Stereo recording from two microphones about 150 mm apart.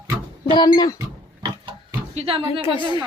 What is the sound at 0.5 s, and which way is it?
Speech, 25° left (ahead or behind).